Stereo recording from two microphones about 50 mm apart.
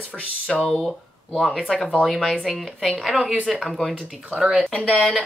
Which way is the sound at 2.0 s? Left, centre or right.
Centre.